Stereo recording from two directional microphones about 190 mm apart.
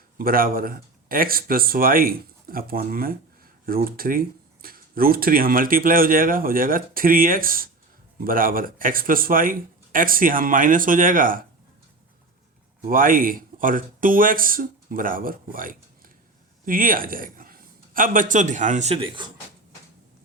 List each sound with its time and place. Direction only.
0.2 s speech: 50° right (ahead or behind)
12.9 s a man's voice: 45° right (ahead or behind); by 19.3 s 25° right (ahead or behind)